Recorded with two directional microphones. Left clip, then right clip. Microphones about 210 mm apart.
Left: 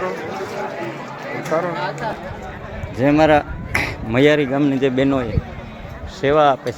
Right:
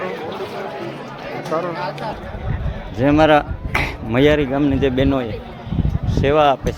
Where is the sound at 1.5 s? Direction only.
45° left (ahead or behind).